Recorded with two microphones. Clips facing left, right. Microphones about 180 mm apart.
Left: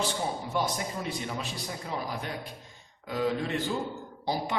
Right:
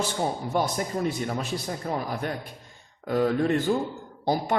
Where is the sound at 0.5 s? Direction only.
50° right (ahead or behind).